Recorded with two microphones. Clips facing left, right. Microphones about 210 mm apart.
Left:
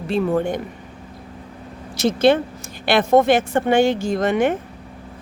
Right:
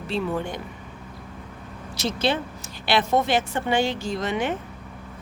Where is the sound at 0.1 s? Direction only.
50° left (ahead or behind).